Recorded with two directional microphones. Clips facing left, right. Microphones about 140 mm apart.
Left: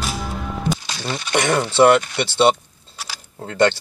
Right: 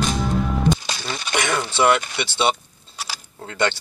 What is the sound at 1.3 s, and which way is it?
Speech, 35° left (ahead or behind).